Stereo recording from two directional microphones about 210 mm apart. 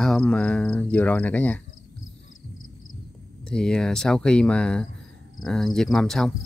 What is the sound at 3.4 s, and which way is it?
Speech, 5° left (ahead or behind).